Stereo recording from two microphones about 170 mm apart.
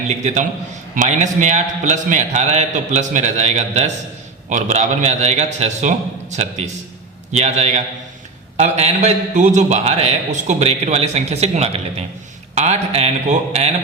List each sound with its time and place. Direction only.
0.1 s a man's voice: 45° right (ahead or behind)